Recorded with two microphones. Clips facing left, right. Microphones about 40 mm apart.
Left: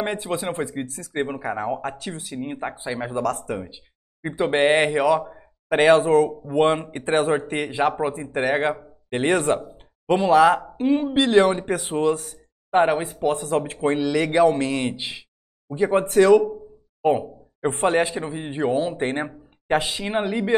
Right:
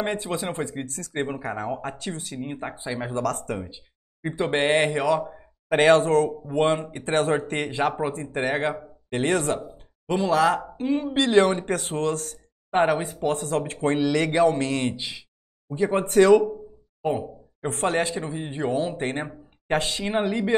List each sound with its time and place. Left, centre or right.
0.0 s speech: centre
7.1 s speech: centre
11.3 s speech: centre
17.0 s speech: left; by 20.5 s centre